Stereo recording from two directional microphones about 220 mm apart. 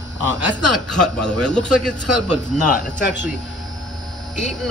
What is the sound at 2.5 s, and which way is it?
Speech, 35° left (ahead or behind).